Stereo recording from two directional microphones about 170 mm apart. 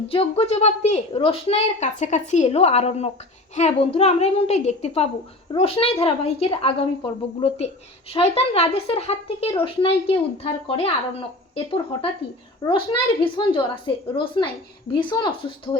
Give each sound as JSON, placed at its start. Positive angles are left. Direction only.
{"t": 0.1, "sound": "a woman's voice", "side_deg": 35}